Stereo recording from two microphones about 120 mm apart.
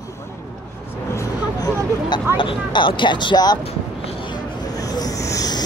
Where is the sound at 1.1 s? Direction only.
25° left (ahead or behind).